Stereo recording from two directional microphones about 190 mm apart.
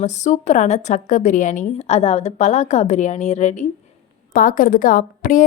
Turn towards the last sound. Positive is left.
turn(degrees=45)  # may be behind; listen again after turning